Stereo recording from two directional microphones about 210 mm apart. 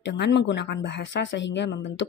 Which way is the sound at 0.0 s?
55° left (ahead or behind).